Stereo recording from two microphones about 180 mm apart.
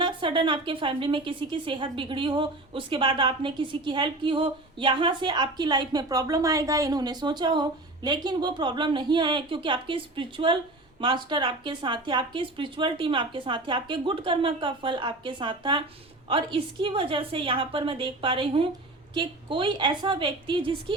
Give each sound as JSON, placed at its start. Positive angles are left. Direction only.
{"t": 0.0, "sound": "a woman's voice", "side_deg": -25}